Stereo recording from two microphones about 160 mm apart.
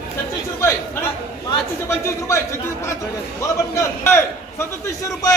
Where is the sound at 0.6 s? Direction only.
15° left (ahead or behind).